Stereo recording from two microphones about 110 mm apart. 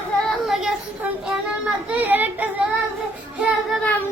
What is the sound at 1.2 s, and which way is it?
Child singing, 10° right (ahead or behind).